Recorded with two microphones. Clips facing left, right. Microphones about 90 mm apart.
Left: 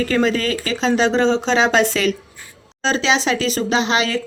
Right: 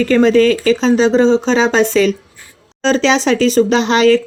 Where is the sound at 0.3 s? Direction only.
40° left (ahead or behind).